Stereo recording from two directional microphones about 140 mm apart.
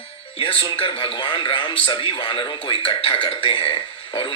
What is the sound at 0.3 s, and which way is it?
Speech, 40° left (ahead or behind).